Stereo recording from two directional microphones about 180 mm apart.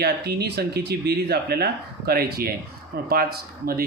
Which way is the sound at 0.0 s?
60° right (ahead or behind).